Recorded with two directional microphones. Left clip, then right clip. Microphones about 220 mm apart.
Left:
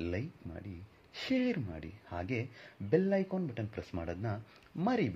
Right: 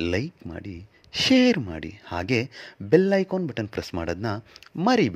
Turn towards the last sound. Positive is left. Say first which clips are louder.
# right 12 dB
turn(degrees=-45)  # may be behind; listen again after turning